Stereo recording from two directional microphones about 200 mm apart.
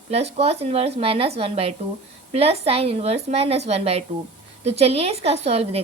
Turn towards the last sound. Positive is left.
turn(degrees=-30)  # may be behind; listen again after turning